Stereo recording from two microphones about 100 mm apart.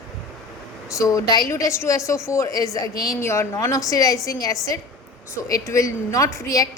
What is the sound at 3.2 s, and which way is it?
A woman's voice, 30° left (ahead or behind).